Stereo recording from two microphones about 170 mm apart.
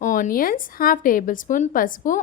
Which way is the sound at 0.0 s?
50° left (ahead or behind).